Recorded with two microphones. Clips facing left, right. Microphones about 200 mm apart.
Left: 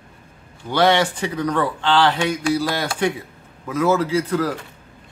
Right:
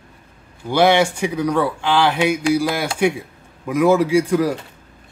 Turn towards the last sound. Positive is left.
turn(degrees=-15)  # may be behind; listen again after turning